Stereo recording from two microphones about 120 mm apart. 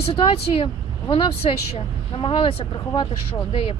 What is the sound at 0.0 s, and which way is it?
Speech, 50° left (ahead or behind).